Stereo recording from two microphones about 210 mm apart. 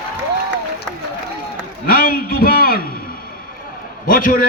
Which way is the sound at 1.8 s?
45° left (ahead or behind).